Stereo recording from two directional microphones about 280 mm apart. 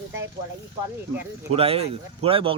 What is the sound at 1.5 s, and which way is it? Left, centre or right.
Speech, right.